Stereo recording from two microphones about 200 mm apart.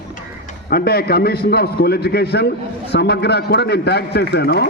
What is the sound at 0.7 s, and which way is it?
A man's voice, 50° left (ahead or behind).